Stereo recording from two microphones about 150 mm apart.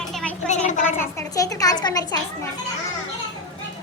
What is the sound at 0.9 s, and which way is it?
Speech, 15° left (ahead or behind).